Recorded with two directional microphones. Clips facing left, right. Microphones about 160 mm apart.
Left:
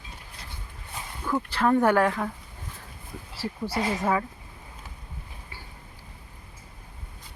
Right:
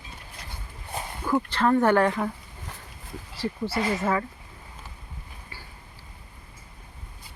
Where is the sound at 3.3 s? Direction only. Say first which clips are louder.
Right 2 dB; 10° left (ahead or behind).